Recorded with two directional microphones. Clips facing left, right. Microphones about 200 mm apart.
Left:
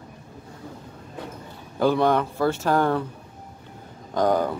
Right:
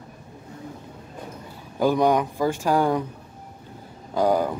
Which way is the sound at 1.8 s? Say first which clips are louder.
Even; 15° right (ahead or behind).